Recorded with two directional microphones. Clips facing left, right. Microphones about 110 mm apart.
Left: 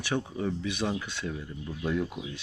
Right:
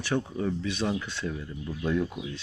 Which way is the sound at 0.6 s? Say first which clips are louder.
Right 1 dB; 15° left (ahead or behind).